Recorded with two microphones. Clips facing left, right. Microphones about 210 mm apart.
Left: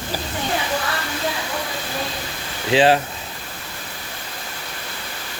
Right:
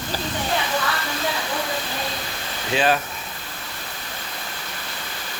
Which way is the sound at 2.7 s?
25° left (ahead or behind).